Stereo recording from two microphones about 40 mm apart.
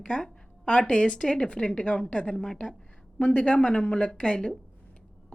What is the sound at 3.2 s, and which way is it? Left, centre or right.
A woman's voice, left.